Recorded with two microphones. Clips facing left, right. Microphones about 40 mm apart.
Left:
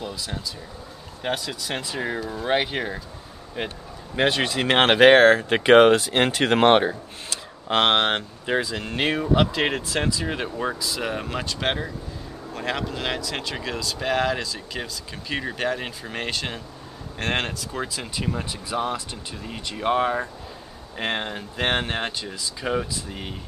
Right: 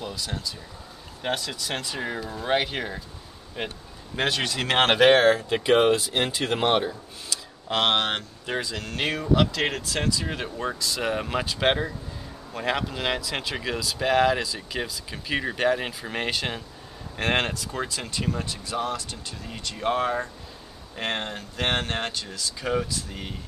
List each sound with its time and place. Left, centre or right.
0.0 s a sound: centre
1.2 s speech: centre; by 5.6 s left
5.6 s speech: left
7.6 s speech: left; by 23.3 s centre